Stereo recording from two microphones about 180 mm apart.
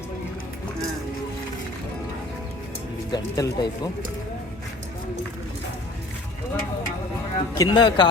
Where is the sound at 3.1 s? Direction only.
25° left (ahead or behind).